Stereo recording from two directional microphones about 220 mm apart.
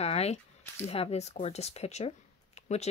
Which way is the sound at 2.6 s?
30° left (ahead or behind).